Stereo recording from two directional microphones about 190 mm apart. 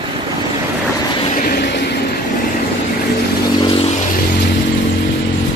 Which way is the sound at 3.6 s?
25° left (ahead or behind).